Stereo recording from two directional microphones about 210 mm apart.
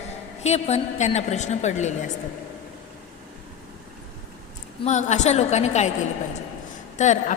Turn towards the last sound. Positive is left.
turn(degrees=35)  # may be behind; listen again after turning